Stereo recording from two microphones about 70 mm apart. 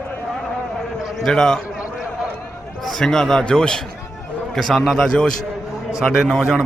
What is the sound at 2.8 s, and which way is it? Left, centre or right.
A man's voice, centre.